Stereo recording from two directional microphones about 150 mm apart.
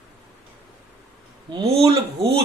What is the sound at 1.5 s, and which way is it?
Speech, 40° right (ahead or behind).